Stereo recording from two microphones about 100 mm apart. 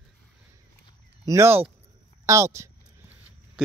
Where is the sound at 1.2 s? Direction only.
30° right (ahead or behind).